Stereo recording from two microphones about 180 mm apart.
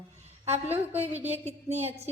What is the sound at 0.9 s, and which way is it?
Speech, 35° right (ahead or behind).